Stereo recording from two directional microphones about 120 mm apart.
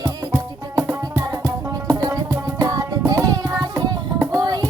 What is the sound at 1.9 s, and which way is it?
Music, 30° right (ahead or behind).